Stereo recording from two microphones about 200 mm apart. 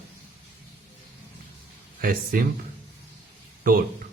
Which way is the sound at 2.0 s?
45° right (ahead or behind).